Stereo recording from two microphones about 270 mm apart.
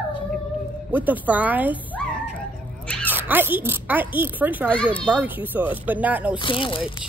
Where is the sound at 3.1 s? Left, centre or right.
Centre.